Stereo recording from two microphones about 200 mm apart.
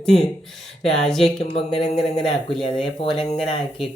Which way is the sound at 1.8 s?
Centre (ahead or behind).